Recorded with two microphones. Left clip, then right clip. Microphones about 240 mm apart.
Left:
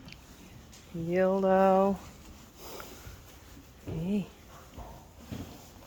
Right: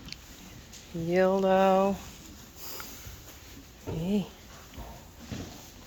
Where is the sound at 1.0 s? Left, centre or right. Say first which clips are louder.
Right 2 dB; centre.